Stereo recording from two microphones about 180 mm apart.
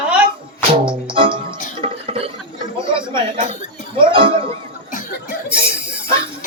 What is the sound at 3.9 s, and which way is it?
Music, 30° right (ahead or behind).